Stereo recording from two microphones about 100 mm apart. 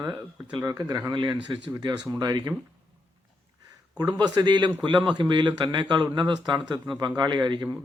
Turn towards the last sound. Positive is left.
turn(degrees=-50)  # may be behind; listen again after turning